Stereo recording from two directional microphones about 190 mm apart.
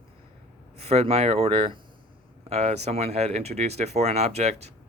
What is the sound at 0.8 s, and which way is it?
Speech, 35° right (ahead or behind).